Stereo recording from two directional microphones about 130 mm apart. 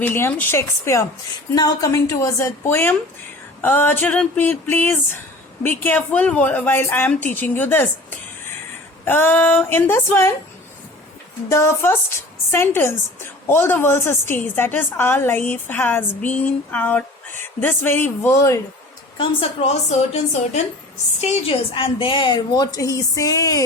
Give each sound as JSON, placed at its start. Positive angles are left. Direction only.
{"t": 0.0, "sound": "a woman's voice", "side_deg": 15}
{"t": 11.4, "sound": "a woman's voice", "side_deg": 20}
{"t": 19.1, "sound": "a woman's voice", "side_deg": 40}
{"t": 19.9, "sound": "a woman's voice", "side_deg": 60}